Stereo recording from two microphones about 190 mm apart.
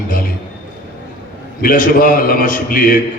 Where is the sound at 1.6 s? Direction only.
45° left (ahead or behind).